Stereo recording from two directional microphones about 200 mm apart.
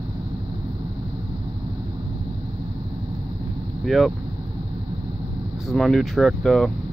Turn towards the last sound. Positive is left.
turn(degrees=0)  # may be behind; listen again after turning